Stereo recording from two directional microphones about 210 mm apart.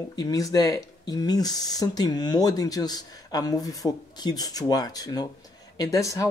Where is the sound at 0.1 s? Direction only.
20° left (ahead or behind).